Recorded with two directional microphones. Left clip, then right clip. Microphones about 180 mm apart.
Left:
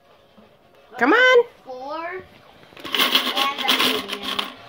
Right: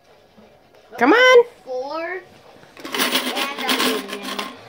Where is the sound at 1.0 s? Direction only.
15° right (ahead or behind).